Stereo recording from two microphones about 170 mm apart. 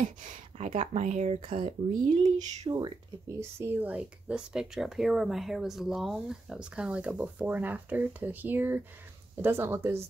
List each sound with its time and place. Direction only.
0.6 s speech: 45° right (ahead or behind)
3.3 s speech: 15° right (ahead or behind)